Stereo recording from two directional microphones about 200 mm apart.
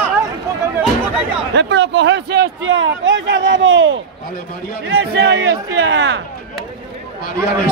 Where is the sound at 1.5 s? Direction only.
60° right (ahead or behind).